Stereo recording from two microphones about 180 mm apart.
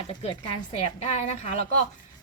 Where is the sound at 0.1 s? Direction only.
30° left (ahead or behind).